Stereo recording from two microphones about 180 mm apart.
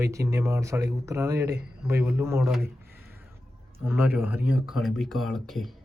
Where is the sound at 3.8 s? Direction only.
10° right (ahead or behind).